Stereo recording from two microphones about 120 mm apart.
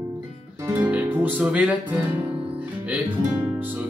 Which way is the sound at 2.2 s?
50° right (ahead or behind).